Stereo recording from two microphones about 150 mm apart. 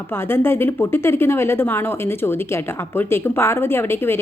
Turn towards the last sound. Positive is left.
turn(degrees=15)  # may be behind; listen again after turning